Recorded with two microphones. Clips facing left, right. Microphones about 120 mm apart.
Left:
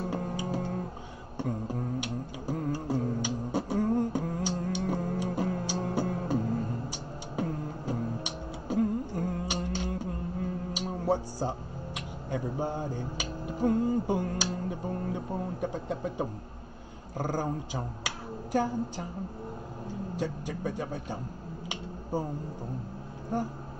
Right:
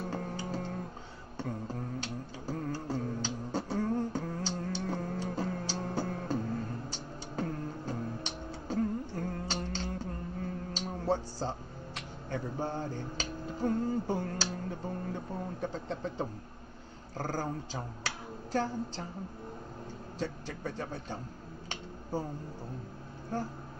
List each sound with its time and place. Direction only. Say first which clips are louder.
0.1 s music: left 4 dB; 15° left (ahead or behind)
10.7 s a woman's voice: left 3 dB; 15° left (ahead or behind)
20.2 s speech: left 2 dB; 15° left (ahead or behind)
23.3 s speech: left 4 dB; 15° left (ahead or behind)